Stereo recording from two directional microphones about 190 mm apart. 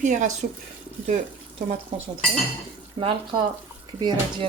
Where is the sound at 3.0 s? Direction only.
25° right (ahead or behind).